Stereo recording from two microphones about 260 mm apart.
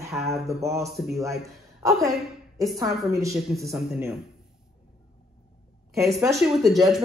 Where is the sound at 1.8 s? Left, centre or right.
Centre.